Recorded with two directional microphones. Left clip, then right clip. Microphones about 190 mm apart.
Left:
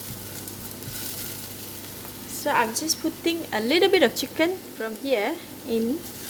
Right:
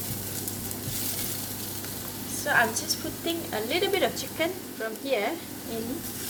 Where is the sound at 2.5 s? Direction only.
50° left (ahead or behind).